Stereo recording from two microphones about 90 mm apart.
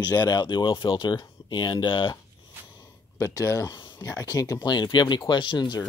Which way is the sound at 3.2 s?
35° left (ahead or behind).